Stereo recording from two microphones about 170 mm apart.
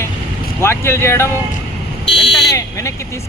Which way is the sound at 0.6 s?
15° left (ahead or behind).